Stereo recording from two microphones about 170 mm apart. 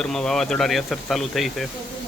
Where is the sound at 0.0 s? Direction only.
5° left (ahead or behind).